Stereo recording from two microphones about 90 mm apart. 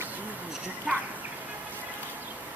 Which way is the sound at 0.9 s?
10° right (ahead or behind).